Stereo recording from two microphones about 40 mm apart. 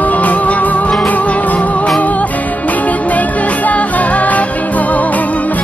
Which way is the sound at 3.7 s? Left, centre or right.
Left.